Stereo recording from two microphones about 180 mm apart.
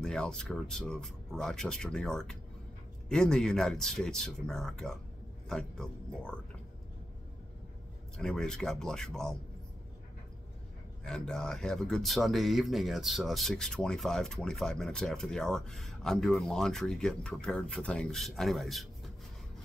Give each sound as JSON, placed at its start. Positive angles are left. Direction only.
{"t": 0.0, "sound": "speech", "side_deg": 5}
{"t": 8.2, "sound": "speech", "side_deg": 5}
{"t": 11.1, "sound": "speech", "side_deg": 5}